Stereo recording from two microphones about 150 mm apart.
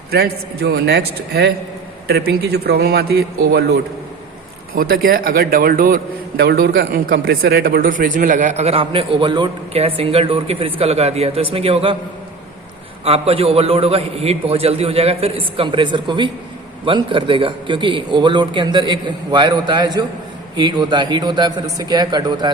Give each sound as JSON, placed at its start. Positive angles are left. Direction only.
{"t": 0.1, "sound": "a man's voice", "side_deg": -90}
{"t": 4.8, "sound": "a man's voice", "side_deg": -75}
{"t": 13.1, "sound": "a man's voice", "side_deg": -40}